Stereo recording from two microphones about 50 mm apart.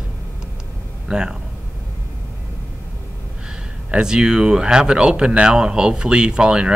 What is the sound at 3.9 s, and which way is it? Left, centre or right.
Speech, centre.